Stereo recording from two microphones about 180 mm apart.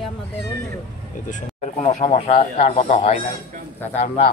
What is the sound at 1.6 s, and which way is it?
Speech, 35° left (ahead or behind).